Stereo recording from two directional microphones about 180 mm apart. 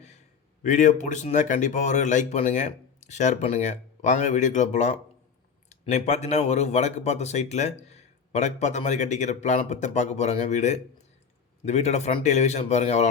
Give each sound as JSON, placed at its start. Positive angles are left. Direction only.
{"t": 0.6, "sound": "speech", "side_deg": 45}